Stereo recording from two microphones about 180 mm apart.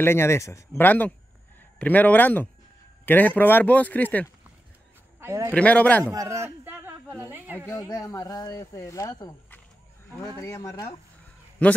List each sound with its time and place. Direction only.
0.0 s a man's voice: 15° left (ahead or behind)
5.2 s a man's voice: 15° right (ahead or behind)
5.5 s speech: 5° left (ahead or behind)
6.0 s a sound: 15° right (ahead or behind)
7.2 s speech: 10° right (ahead or behind)
7.5 s speech: 15° left (ahead or behind)
11.6 s speech: 5° left (ahead or behind)